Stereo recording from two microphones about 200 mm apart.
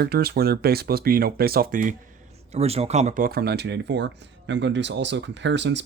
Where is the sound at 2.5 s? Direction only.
30° right (ahead or behind).